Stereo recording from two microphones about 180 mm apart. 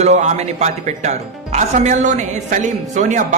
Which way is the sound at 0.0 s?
40° right (ahead or behind).